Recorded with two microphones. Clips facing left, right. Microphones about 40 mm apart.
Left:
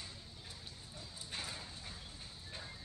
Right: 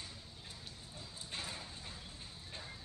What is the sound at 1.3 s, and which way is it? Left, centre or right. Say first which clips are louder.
Dog: even; right.